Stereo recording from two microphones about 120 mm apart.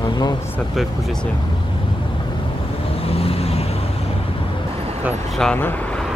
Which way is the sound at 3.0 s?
55° left (ahead or behind).